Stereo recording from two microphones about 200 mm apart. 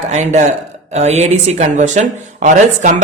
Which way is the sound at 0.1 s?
35° right (ahead or behind).